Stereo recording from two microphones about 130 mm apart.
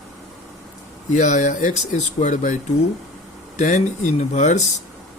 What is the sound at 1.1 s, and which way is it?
Speech, 70° left (ahead or behind).